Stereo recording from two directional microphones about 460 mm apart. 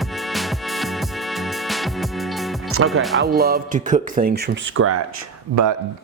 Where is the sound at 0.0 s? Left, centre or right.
Centre.